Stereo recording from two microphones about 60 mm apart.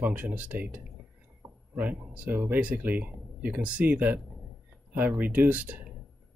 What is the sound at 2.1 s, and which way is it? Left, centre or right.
Speech, right.